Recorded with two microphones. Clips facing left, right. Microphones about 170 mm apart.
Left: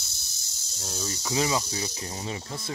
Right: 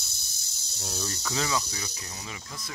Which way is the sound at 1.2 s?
20° left (ahead or behind).